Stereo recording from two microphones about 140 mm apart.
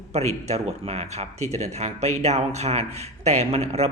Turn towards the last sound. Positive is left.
turn(degrees=-50)  # may be behind; listen again after turning